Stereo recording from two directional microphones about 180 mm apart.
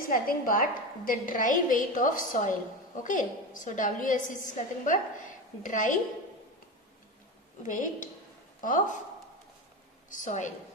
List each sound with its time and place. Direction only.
0.1 s a woman's voice: 50° left (ahead or behind)
7.6 s a woman's voice: 45° left (ahead or behind)
10.1 s a woman's voice: 45° left (ahead or behind)